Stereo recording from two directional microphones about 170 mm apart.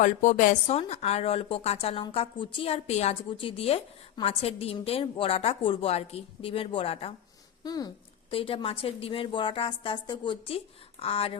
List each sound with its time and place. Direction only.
0.0 s a woman's voice: 50° left (ahead or behind)
0.7 s a woman's voice: 35° left (ahead or behind)
7.6 s a woman's voice: 25° left (ahead or behind)